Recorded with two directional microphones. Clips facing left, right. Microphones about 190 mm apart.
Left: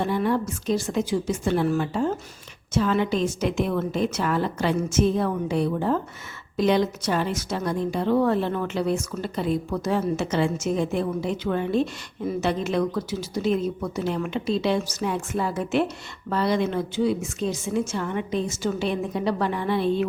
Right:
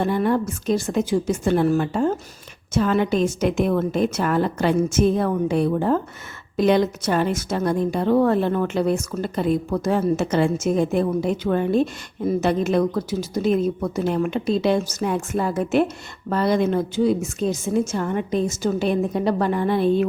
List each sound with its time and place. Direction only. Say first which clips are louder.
0.0 s a woman's voice: right 3 dB; 50° right (ahead or behind)